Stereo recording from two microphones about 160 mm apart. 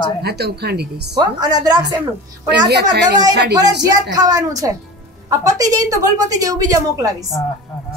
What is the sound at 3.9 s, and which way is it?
A woman's voice, 20° right (ahead or behind).